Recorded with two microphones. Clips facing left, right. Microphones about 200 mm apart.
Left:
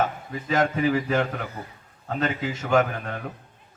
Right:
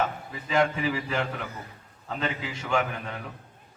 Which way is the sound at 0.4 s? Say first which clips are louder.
Left 3 dB; 45° left (ahead or behind).